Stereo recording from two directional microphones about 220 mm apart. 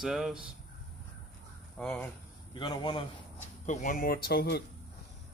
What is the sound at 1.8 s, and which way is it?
Speech, 5° left (ahead or behind).